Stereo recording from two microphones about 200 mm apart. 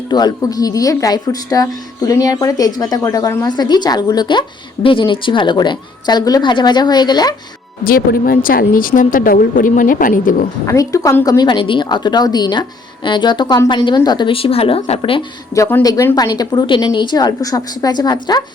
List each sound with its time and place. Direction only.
0.1 s a woman's voice: 20° left (ahead or behind)
7.9 s speech: 45° left (ahead or behind)
10.7 s a woman's voice: 15° left (ahead or behind)
15.5 s a woman's voice: 15° left (ahead or behind)